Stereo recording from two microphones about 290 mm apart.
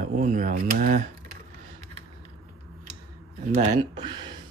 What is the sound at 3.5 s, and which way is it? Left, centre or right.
Speech, centre.